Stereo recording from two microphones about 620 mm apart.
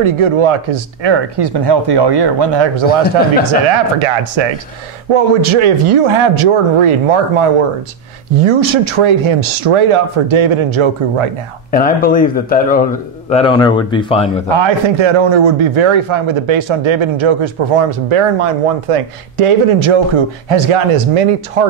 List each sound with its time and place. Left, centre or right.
0.0 s a man's voice: right
8.5 s a man's voice: right
11.7 s speech: centre
14.5 s a man's voice: right